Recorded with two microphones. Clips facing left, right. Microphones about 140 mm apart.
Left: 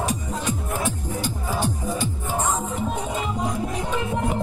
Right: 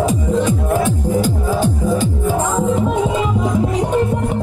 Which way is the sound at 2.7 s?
90° right.